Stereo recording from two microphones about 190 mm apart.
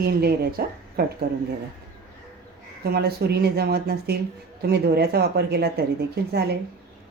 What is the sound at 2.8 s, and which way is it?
Speech, 55° right (ahead or behind).